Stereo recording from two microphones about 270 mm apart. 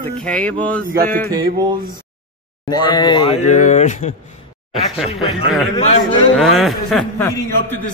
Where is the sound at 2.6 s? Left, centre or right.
Centre.